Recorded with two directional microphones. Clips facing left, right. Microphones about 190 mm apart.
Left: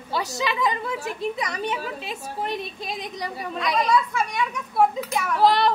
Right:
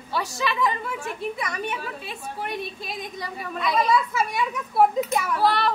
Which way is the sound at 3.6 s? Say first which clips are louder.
Even; 5° right (ahead or behind).